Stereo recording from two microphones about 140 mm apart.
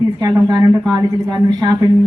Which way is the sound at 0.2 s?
25° right (ahead or behind).